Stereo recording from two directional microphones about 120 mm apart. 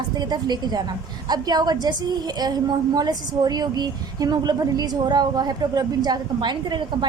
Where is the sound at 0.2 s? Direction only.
35° right (ahead or behind).